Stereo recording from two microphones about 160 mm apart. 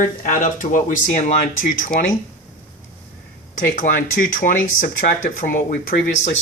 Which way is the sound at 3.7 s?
55° left (ahead or behind).